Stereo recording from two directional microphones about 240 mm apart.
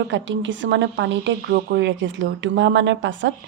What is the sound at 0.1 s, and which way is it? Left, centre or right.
Speech, right.